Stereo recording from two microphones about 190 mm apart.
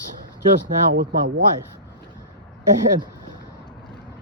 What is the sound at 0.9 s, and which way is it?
Speech, 60° right (ahead or behind).